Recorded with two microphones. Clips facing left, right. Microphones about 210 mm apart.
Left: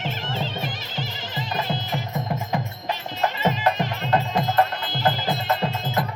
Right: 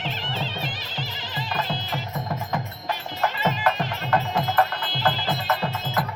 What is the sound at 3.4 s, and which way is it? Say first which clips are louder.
Music: left 2 dB; 20° left (ahead or behind).